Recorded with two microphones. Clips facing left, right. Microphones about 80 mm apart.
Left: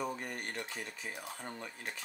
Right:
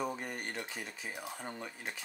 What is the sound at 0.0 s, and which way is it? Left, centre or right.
Speech, centre.